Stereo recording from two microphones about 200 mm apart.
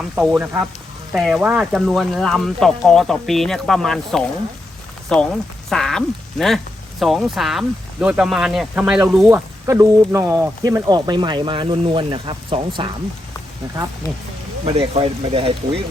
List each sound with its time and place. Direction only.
0.2 s speech: 10° right (ahead or behind); by 12.9 s 25° right (ahead or behind)
14.6 s speech: 30° right (ahead or behind)